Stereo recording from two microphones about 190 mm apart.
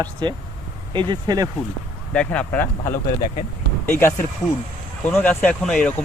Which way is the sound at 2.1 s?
5° left (ahead or behind).